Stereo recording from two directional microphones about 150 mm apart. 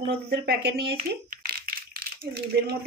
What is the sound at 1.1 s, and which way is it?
Crumpling, 80° right.